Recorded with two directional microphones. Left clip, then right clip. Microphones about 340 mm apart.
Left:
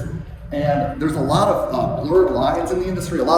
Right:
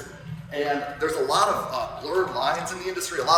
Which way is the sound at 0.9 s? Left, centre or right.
Centre.